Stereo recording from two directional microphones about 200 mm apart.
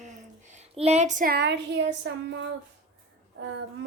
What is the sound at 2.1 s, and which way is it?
Speech, 65° right (ahead or behind).